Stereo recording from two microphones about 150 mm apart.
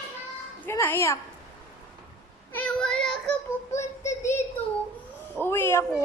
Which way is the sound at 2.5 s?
10° left (ahead or behind).